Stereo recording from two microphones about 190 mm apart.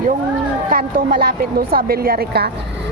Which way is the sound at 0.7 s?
50° right (ahead or behind).